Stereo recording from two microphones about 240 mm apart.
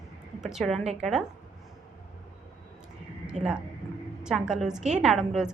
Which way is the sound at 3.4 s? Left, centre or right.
Right.